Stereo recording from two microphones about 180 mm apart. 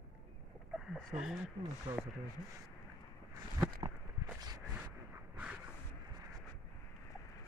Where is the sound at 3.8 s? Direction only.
25° right (ahead or behind).